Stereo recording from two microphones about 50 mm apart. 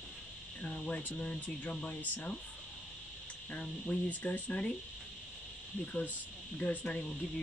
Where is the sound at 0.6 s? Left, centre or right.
Left.